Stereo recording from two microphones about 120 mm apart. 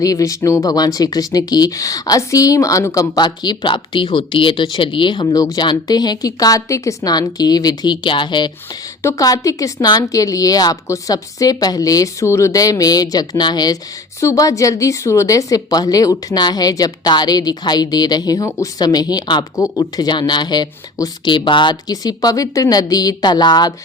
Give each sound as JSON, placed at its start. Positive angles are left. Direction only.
{"t": 0.0, "sound": "a woman's voice", "side_deg": 30}
{"t": 9.0, "sound": "a woman's voice", "side_deg": 25}